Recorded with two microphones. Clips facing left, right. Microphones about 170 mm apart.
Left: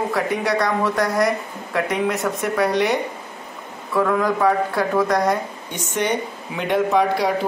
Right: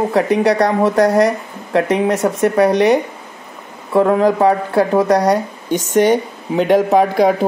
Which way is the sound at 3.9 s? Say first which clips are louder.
Right 7 dB; 30° right (ahead or behind).